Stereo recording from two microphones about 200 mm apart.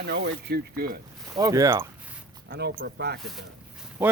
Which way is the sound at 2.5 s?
50° right (ahead or behind).